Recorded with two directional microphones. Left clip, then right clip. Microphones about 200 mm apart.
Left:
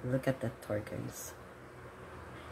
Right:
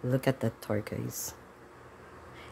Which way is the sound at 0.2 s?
50° right (ahead or behind).